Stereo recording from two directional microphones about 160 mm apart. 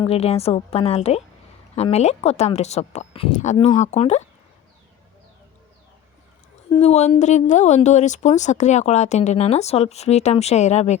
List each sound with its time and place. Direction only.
0.0 s a woman's voice: 40° left (ahead or behind)
6.7 s a woman's voice: 40° left (ahead or behind)